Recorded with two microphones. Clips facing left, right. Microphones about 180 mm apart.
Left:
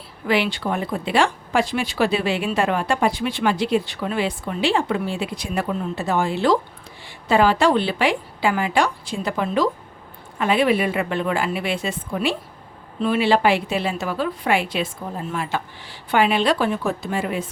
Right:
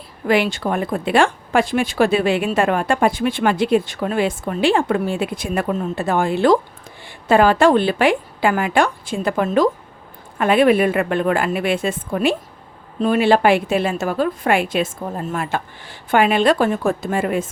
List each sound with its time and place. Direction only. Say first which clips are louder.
0.3 s speech: right 3 dB; 45° right (ahead or behind)